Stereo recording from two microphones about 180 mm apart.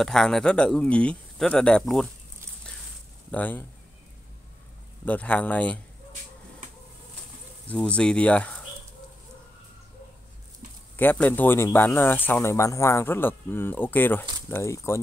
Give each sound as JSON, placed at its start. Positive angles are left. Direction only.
{"t": 0.0, "sound": "speech", "side_deg": 5}
{"t": 3.3, "sound": "speech", "side_deg": 10}
{"t": 5.0, "sound": "speech", "side_deg": 5}
{"t": 7.6, "sound": "speech", "side_deg": 5}
{"t": 11.0, "sound": "speech", "side_deg": 10}